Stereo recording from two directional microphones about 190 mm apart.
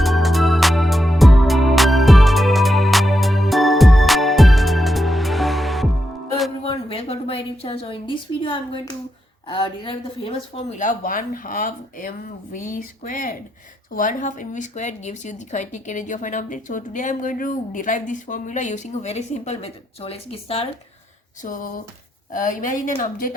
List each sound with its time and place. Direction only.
0.0 s music: centre (ahead or behind)
6.7 s a sound: 30° left (ahead or behind)
9.5 s speech: 25° left (ahead or behind)
21.4 s speech: 45° left (ahead or behind)